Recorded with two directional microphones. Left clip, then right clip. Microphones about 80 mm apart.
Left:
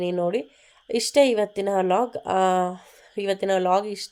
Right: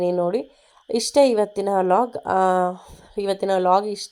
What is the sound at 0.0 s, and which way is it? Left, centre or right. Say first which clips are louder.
Speech: right 3 dB; right.